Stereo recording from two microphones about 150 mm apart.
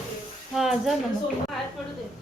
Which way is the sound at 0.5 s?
Centre (ahead or behind).